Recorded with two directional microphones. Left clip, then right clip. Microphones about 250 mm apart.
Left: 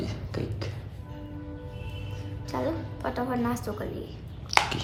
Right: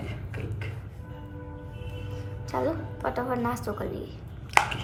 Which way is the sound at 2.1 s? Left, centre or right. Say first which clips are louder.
Right 2 dB; centre.